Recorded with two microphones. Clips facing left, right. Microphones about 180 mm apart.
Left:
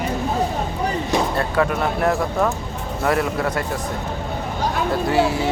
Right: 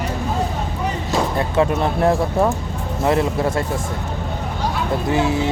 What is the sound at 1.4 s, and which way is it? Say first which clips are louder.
Speech: right 2 dB; 25° right (ahead or behind).